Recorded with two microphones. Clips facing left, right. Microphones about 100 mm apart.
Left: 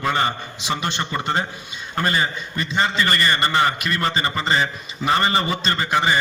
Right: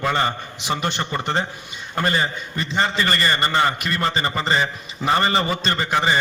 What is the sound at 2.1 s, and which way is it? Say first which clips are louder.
A man's voice: even; 30° right (ahead or behind).